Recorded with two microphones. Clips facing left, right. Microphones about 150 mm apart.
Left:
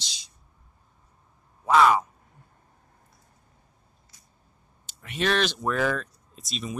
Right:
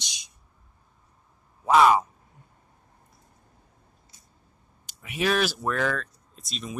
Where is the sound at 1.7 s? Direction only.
20° right (ahead or behind).